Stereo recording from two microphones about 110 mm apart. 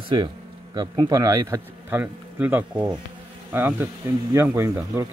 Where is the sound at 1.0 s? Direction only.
35° right (ahead or behind).